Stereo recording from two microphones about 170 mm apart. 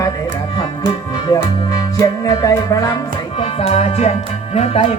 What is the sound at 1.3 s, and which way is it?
Music, 20° left (ahead or behind).